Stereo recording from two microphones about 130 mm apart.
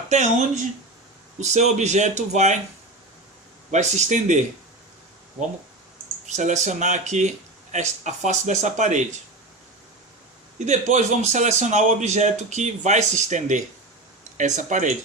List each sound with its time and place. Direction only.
0.1 s speech: 65° right (ahead or behind)
3.7 s speech: 60° right (ahead or behind)
6.2 s speech: 65° right (ahead or behind)
10.7 s speech: 65° right (ahead or behind)